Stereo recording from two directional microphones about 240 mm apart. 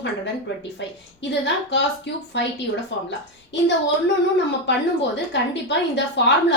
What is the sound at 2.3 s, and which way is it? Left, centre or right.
Speech, left.